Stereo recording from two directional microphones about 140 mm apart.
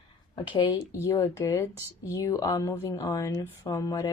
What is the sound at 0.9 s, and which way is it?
Speech, 20° left (ahead or behind).